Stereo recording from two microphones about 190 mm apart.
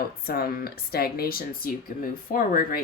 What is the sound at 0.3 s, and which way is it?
Speech, 55° left (ahead or behind).